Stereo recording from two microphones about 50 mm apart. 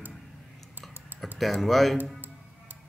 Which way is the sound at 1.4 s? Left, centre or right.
Centre.